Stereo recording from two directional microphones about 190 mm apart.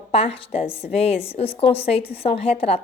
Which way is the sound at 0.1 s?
30° left (ahead or behind).